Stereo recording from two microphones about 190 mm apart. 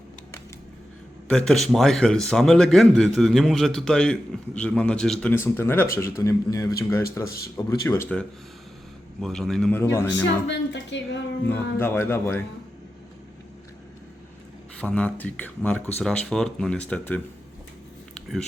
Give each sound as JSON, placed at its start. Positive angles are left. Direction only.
{"t": 1.3, "sound": "a man's voice", "side_deg": 5}
{"t": 9.2, "sound": "a man's voice", "side_deg": 0}
{"t": 10.4, "sound": "a woman's voice", "side_deg": 70}
{"t": 11.4, "sound": "a man's voice", "side_deg": 10}
{"t": 14.8, "sound": "a man's voice", "side_deg": 5}